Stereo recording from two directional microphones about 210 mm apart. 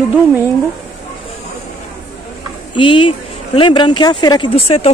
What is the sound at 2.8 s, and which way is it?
Speech, 25° left (ahead or behind).